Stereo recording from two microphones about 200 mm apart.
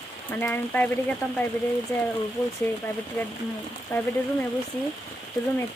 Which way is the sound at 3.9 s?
10° left (ahead or behind).